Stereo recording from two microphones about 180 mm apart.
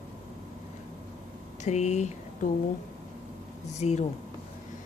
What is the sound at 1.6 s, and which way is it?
Speech, 40° left (ahead or behind).